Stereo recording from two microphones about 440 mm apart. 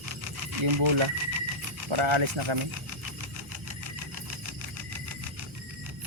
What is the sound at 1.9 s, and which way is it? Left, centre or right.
Speech, right.